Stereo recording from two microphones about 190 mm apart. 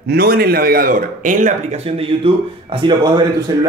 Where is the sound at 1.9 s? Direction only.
30° right (ahead or behind).